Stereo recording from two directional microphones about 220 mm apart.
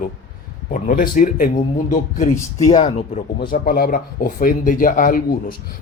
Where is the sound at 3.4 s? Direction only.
45° left (ahead or behind).